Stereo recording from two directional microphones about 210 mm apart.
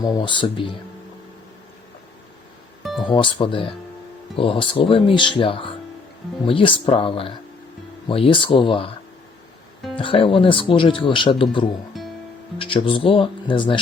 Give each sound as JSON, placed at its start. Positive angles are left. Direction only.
{"t": 0.0, "sound": "speech", "side_deg": 20}
{"t": 2.8, "sound": "music", "side_deg": 0}
{"t": 3.1, "sound": "speech", "side_deg": 25}
{"t": 9.9, "sound": "speech", "side_deg": 25}
{"t": 11.9, "sound": "music", "side_deg": 0}
{"t": 12.5, "sound": "speech", "side_deg": 25}